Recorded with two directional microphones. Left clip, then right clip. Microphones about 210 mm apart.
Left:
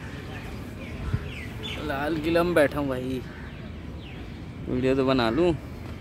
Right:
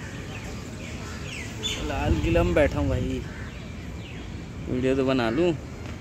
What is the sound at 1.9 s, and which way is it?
Speech, 5° left (ahead or behind).